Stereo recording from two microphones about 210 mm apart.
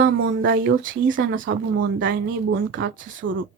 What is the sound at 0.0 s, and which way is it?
Speech, 55° right (ahead or behind).